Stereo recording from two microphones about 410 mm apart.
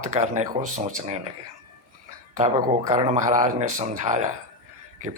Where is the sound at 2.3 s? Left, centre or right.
Centre.